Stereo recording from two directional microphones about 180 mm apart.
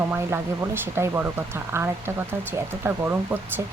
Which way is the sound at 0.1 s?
15° right (ahead or behind).